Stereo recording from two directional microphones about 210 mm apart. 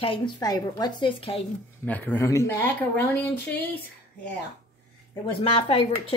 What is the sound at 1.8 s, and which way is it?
Speech, 10° left (ahead or behind).